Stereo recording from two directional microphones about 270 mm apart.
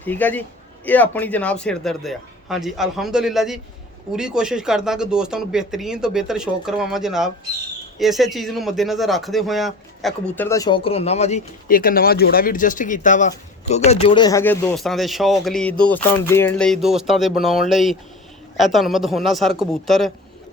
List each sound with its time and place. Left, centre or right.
0.0 s a man's voice: centre